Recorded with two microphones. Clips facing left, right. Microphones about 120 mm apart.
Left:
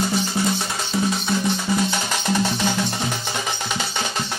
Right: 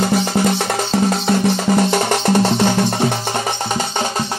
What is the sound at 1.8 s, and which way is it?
Music, 60° right (ahead or behind).